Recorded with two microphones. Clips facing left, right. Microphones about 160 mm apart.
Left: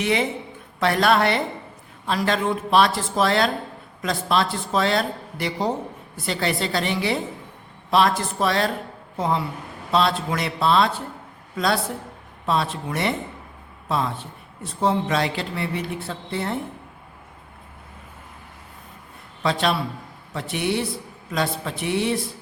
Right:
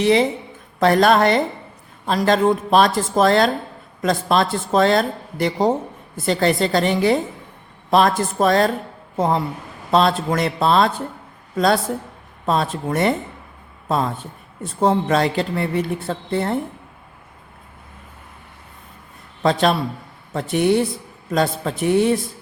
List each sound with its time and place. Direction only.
0.0 s speech: 35° right (ahead or behind)
19.4 s a man's voice: 45° right (ahead or behind)